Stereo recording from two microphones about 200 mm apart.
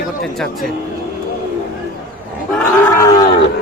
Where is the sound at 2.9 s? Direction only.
15° left (ahead or behind).